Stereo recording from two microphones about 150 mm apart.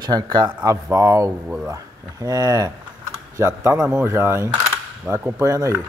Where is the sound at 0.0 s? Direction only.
25° right (ahead or behind).